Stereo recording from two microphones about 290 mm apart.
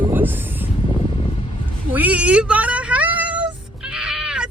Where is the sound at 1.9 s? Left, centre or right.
Centre.